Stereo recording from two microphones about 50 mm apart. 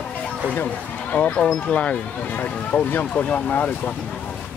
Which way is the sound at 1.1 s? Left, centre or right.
Left.